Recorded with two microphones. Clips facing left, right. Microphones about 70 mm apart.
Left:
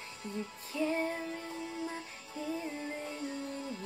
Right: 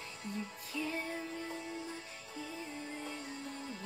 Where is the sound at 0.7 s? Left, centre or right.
Left.